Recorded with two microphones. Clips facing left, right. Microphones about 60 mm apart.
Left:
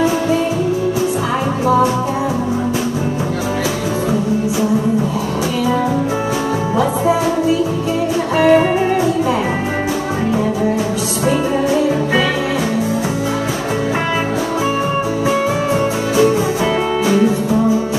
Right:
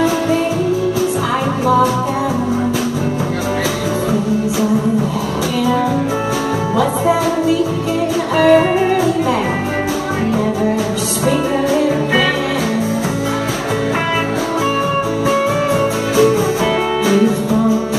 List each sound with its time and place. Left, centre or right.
8.4 s music: left